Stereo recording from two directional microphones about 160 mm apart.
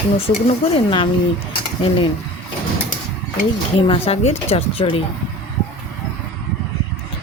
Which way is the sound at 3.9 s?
40° left (ahead or behind).